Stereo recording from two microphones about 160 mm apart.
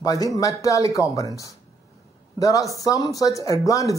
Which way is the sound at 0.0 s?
20° left (ahead or behind).